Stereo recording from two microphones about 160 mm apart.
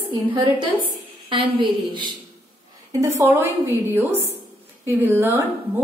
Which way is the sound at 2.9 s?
15° right (ahead or behind).